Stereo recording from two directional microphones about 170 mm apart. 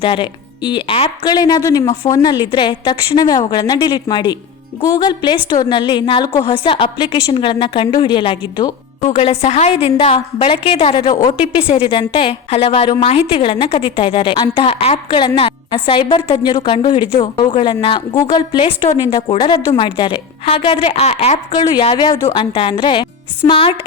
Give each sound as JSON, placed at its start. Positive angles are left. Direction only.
{"t": 0.0, "sound": "a woman's voice", "side_deg": 30}
{"t": 21.6, "sound": "a woman's voice", "side_deg": 20}
{"t": 22.3, "sound": "a woman's voice", "side_deg": 30}